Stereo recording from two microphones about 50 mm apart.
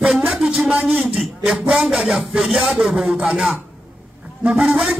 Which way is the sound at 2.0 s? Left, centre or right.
Centre.